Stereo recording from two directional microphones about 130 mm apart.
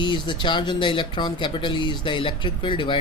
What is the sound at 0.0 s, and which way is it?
Speech, 35° left (ahead or behind).